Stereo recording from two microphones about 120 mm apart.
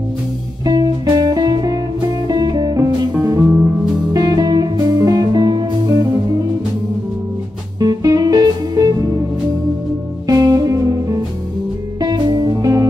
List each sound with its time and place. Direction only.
0.7 s music: 35° right (ahead or behind)
7.8 s music: 35° right (ahead or behind)
10.2 s music: 30° right (ahead or behind)